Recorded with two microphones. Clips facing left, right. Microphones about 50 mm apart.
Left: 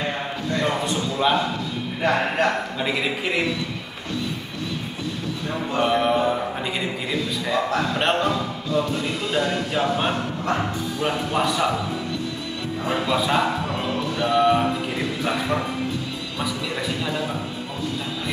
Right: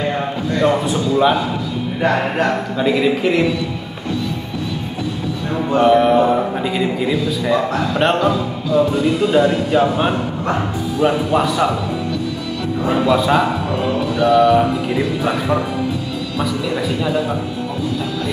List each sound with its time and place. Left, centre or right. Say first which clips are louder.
0.8 s speech: right 7 dB; centre
2.8 s a man's voice: right 11 dB; centre
5.8 s a man's voice: right 8 dB; centre
6.2 s music: right 7 dB; right
6.6 s a man's voice: right 8 dB; centre
12.8 s a man's voice: right 7 dB; centre
14.1 s music: right 7 dB; centre
15.2 s speech: right 3 dB; centre
16.3 s a man's voice: right 7 dB; centre